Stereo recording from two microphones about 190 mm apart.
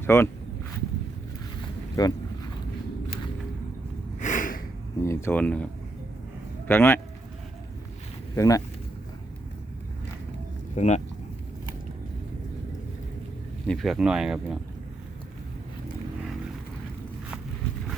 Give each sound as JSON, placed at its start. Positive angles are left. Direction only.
{"t": 0.0, "sound": "speech", "side_deg": 10}
{"t": 1.6, "sound": "a sound", "side_deg": 20}
{"t": 4.2, "sound": "snort", "side_deg": 40}
{"t": 4.9, "sound": "speech", "side_deg": 15}
{"t": 6.7, "sound": "speech", "side_deg": 10}
{"t": 8.4, "sound": "speech", "side_deg": 20}
{"t": 10.8, "sound": "speech", "side_deg": 35}
{"t": 13.7, "sound": "speech", "side_deg": 0}